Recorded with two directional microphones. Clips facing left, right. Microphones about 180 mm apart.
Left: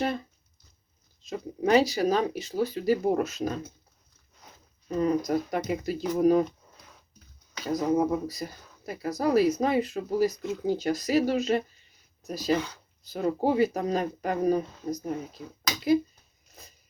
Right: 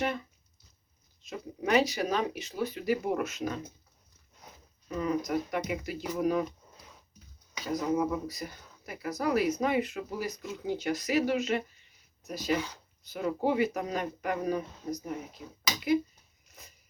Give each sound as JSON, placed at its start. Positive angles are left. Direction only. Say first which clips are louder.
{"t": 0.0, "sound": "a sound", "louder": "left 3 dB", "side_deg": 35}
{"t": 1.2, "sound": "speech", "louder": "left 6 dB", "side_deg": 35}
{"t": 4.9, "sound": "speech", "louder": "left 5 dB", "side_deg": 35}
{"t": 7.7, "sound": "speech", "louder": "left 4 dB", "side_deg": 35}